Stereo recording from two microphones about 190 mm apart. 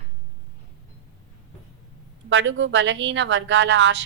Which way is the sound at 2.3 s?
80° right.